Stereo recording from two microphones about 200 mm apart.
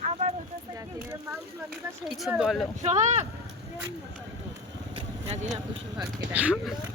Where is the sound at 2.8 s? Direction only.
35° right (ahead or behind).